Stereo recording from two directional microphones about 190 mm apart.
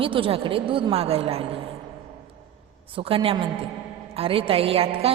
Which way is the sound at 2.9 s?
30° right (ahead or behind).